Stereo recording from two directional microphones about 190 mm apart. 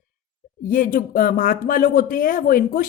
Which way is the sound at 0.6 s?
45° left (ahead or behind).